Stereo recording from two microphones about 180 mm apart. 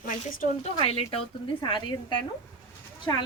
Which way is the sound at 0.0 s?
50° left (ahead or behind).